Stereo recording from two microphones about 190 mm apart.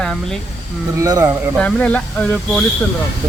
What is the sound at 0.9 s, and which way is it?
Speech, 20° right (ahead or behind).